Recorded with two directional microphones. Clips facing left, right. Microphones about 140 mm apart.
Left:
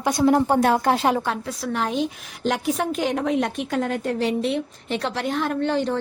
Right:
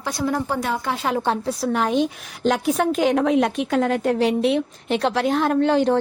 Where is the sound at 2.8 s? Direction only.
80° right.